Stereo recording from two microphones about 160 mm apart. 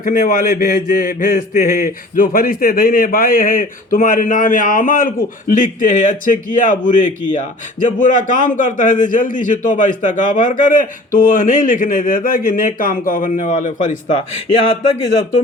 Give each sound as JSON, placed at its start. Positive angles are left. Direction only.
{"t": 0.0, "sound": "speech", "side_deg": 60}